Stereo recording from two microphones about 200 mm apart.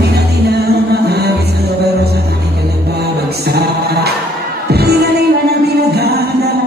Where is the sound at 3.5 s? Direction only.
55° right (ahead or behind).